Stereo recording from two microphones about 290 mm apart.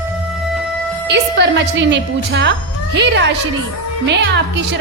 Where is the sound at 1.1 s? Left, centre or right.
Right.